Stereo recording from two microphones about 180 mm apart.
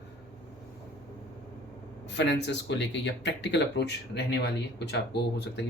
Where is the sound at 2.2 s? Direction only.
75° left (ahead or behind).